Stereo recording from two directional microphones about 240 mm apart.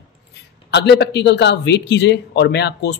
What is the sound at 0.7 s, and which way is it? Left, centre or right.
A man's voice, left.